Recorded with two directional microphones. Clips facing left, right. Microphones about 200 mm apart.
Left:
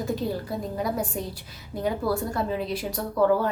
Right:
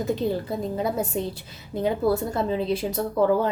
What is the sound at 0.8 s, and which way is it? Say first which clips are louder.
Speech: right 2 dB; 25° right (ahead or behind).